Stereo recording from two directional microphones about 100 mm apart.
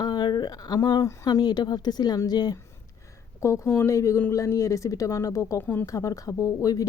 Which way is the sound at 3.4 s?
30° left (ahead or behind).